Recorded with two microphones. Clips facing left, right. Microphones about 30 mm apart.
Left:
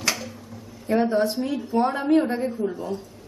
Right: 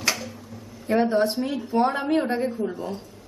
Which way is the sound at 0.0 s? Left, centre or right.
Centre.